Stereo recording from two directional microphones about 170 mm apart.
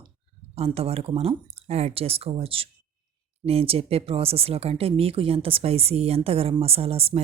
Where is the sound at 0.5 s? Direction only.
35° right (ahead or behind).